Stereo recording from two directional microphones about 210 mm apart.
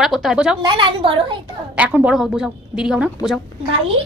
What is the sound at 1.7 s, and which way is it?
Speech, 5° right (ahead or behind).